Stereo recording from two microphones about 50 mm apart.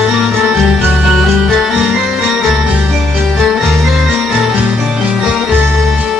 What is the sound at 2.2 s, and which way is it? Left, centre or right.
Music, centre.